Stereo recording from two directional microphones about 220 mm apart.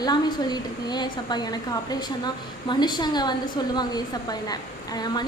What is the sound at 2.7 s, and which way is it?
A woman's voice, 20° left (ahead or behind).